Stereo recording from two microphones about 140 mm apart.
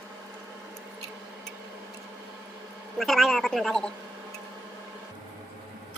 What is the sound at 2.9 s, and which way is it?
A man's voice, centre (ahead or behind).